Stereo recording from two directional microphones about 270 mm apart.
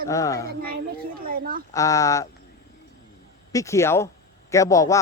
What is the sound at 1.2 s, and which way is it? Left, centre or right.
Speech, right.